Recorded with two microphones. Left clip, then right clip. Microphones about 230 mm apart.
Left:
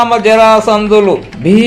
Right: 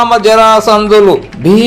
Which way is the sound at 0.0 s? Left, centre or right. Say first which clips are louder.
Right 1 dB; right.